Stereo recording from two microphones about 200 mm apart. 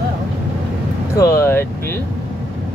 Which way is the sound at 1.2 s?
15° left (ahead or behind).